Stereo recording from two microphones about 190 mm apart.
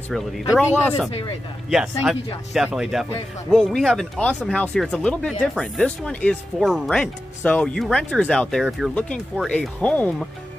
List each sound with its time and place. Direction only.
0.1 s speech: 5° left (ahead or behind)